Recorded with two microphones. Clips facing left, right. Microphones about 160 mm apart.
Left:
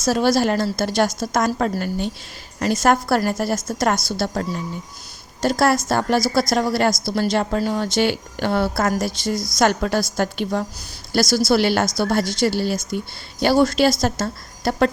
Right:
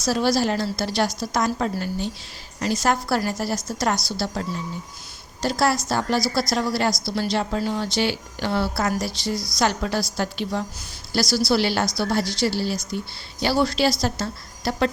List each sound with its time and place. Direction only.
0.0 s a woman's voice: 50° left (ahead or behind)